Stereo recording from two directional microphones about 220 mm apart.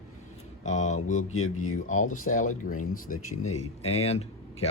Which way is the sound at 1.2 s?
75° left (ahead or behind).